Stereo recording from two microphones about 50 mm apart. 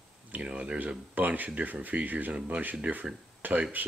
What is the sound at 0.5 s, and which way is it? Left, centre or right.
Speech, right.